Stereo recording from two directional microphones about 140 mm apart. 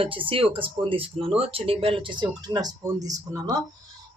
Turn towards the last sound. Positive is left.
turn(degrees=-25)  # may be behind; listen again after turning